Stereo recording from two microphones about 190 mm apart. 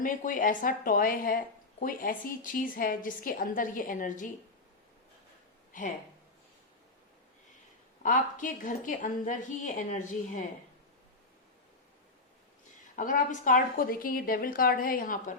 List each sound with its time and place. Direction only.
0.0 s speech: 45° left (ahead or behind)
5.7 s speech: 45° left (ahead or behind)
8.0 s speech: 45° left (ahead or behind)
13.0 s speech: 45° left (ahead or behind)